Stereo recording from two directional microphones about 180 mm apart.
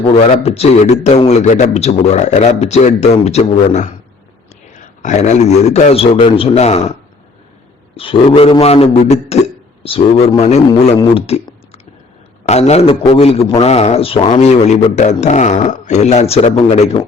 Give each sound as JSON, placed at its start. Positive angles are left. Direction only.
{"t": 0.1, "sound": "a man's voice", "side_deg": 35}
{"t": 5.0, "sound": "a man's voice", "side_deg": 40}
{"t": 7.9, "sound": "a man's voice", "side_deg": 30}